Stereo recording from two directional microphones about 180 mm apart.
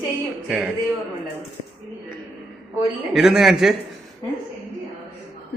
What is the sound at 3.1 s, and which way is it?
Speech, centre (ahead or behind).